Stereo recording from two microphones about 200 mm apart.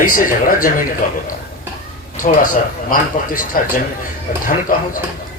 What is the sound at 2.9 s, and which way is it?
Speech, 45° left (ahead or behind).